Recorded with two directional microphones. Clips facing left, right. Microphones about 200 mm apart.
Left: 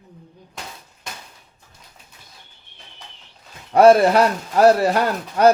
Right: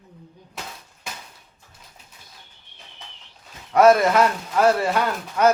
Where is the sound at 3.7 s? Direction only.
30° left (ahead or behind).